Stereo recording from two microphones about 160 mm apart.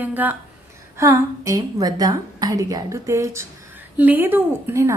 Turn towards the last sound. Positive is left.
turn(degrees=-15)  # may be behind; listen again after turning